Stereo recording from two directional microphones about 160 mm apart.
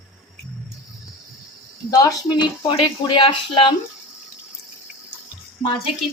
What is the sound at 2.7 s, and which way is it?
Speech, 30° left (ahead or behind).